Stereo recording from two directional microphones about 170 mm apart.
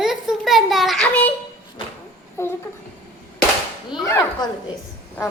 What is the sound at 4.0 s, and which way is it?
Speech, 20° left (ahead or behind).